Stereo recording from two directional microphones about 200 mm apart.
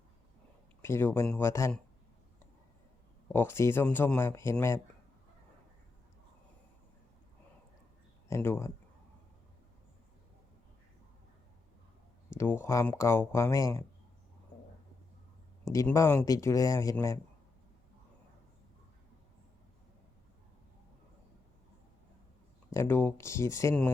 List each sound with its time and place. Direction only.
0.8 s speech: 10° left (ahead or behind)
3.3 s speech: 10° left (ahead or behind)
8.3 s speech: 15° left (ahead or behind)
12.4 s speech: 10° left (ahead or behind)
15.7 s speech: 15° left (ahead or behind)
22.7 s speech: 10° left (ahead or behind)